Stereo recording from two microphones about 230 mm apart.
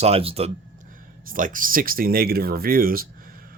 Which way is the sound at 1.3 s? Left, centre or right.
Right.